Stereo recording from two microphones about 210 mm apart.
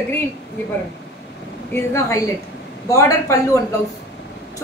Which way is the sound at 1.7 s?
10° left (ahead or behind).